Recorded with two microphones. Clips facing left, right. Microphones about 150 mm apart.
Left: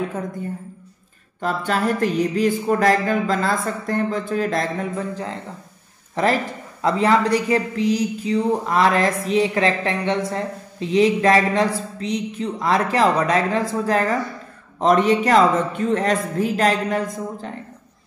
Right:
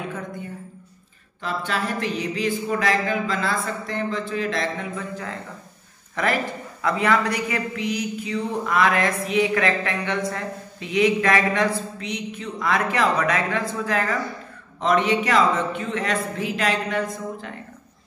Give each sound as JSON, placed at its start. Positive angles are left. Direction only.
{"t": 1.4, "sound": "speech", "side_deg": 45}
{"t": 6.8, "sound": "speech", "side_deg": 30}